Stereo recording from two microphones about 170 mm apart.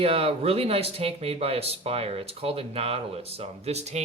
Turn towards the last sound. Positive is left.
turn(degrees=-40)  # may be behind; listen again after turning